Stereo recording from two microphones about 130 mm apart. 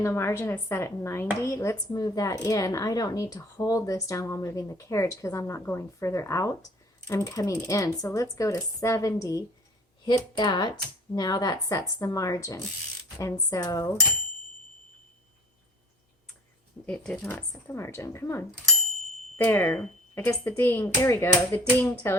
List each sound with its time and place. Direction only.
0.0 s speech: 20° left (ahead or behind)
16.8 s speech: 10° left (ahead or behind)
17.5 s speech: 20° left (ahead or behind)